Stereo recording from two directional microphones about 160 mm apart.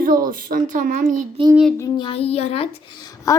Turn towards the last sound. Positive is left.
turn(degrees=20)  # may be behind; listen again after turning